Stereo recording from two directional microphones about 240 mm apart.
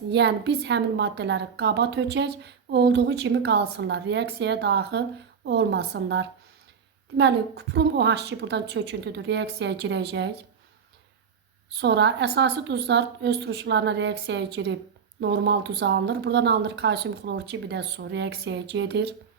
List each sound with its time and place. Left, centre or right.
0.1 s a woman's voice: right
11.8 s a woman's voice: right